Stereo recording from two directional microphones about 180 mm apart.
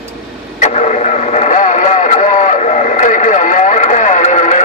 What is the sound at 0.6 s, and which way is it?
Vehicle, 40° left (ahead or behind).